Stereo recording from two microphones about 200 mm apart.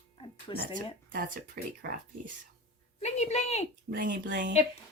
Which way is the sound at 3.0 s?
35° left (ahead or behind).